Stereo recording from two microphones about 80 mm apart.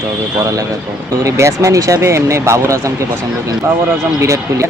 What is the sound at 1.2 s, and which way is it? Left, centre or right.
Speech, right.